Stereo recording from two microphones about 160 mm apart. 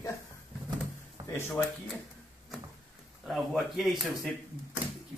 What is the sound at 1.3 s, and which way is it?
Speech, 15° left (ahead or behind).